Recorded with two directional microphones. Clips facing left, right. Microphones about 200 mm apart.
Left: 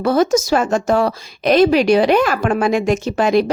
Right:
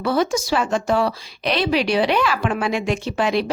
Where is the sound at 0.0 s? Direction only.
45° left (ahead or behind).